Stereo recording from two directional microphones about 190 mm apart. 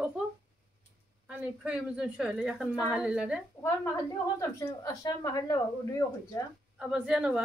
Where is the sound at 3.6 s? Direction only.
15° left (ahead or behind).